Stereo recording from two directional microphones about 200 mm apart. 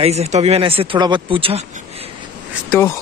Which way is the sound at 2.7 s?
10° left (ahead or behind).